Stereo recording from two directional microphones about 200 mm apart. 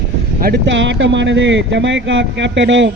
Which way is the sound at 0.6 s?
65° right (ahead or behind).